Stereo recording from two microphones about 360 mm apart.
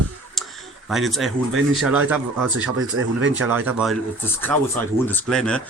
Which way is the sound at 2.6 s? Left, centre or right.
Right.